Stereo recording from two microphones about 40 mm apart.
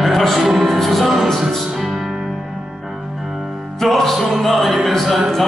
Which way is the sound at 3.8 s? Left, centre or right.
Centre.